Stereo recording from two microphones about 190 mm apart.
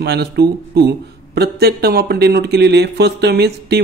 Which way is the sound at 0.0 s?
60° right (ahead or behind).